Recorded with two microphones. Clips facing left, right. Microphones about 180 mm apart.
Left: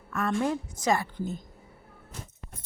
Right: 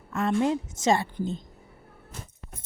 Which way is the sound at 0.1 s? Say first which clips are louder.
Right 3 dB; 25° right (ahead or behind).